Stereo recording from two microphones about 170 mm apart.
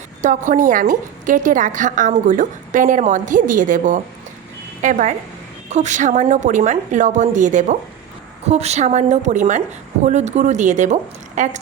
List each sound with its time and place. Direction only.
0.2 s a woman's voice: 50° right (ahead or behind)